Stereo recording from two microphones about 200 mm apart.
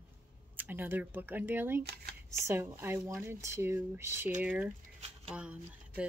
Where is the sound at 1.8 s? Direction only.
55° right (ahead or behind).